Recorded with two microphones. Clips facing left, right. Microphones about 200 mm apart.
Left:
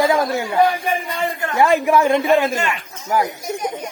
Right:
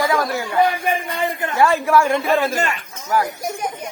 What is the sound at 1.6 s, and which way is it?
Speech, 15° left (ahead or behind).